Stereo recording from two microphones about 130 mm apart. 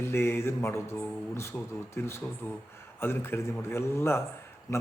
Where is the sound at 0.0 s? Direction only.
20° left (ahead or behind).